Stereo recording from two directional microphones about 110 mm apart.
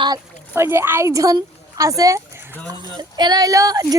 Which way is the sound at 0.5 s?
20° right (ahead or behind).